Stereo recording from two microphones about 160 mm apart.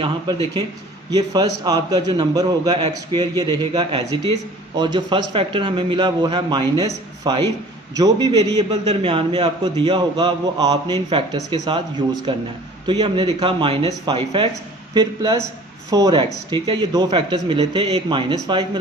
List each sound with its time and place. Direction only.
1.1 s a man's voice: 25° right (ahead or behind)